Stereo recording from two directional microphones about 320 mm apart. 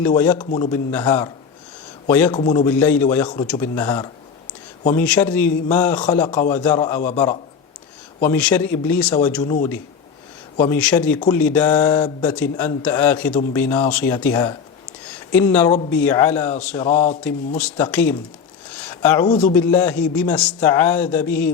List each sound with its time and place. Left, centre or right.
0.0 s speech: centre
16.7 s a sound: centre
17.6 s speech: centre
18.9 s speech: centre